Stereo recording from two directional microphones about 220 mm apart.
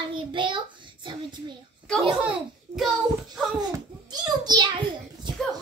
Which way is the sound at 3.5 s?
20° right (ahead or behind).